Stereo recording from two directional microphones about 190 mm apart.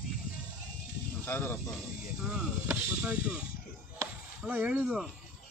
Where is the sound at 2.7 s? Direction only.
10° right (ahead or behind).